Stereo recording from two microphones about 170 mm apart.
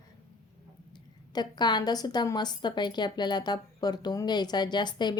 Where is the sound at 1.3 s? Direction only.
25° left (ahead or behind).